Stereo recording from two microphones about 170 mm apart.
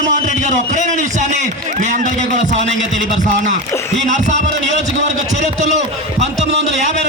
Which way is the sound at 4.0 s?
45° right (ahead or behind).